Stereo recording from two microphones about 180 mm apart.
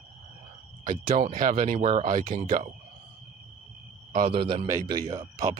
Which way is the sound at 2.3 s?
50° right (ahead or behind).